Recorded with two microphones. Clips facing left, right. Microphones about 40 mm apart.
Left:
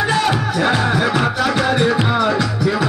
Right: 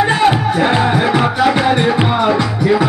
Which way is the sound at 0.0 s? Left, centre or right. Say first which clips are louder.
Right 5 dB; right.